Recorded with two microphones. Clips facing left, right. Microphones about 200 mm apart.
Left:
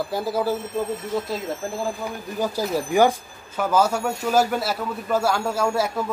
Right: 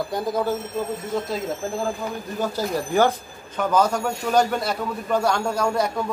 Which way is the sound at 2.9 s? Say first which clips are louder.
Left 2 dB; 10° left (ahead or behind).